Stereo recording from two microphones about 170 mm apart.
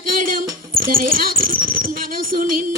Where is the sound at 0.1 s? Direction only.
55° right (ahead or behind).